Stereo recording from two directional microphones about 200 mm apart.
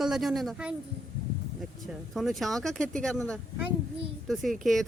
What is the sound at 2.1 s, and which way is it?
Speech, centre (ahead or behind).